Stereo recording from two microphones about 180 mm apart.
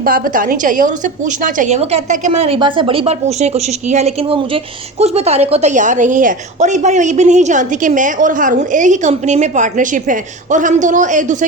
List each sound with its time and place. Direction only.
0.0 s a woman's voice: 50° right (ahead or behind)